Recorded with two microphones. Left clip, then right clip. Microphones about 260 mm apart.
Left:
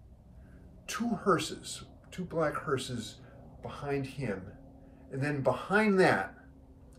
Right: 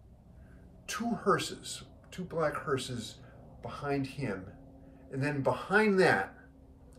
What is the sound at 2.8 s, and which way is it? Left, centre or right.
A man's voice, centre.